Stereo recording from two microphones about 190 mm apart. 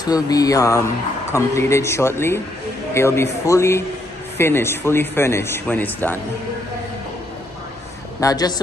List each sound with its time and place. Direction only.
0.0 s a man's voice: 20° left (ahead or behind)
8.2 s speech: 20° left (ahead or behind)